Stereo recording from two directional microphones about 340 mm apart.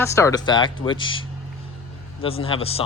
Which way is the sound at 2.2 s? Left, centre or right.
Centre.